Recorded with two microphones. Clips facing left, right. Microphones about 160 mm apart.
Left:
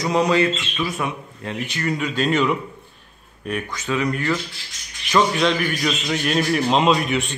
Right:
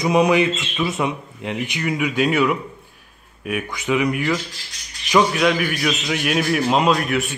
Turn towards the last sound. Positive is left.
turn(degrees=0)  # may be behind; listen again after turning